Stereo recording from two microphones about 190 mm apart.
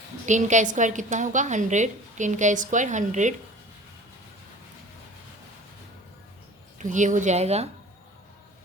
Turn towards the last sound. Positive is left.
turn(degrees=-35)  # may be behind; listen again after turning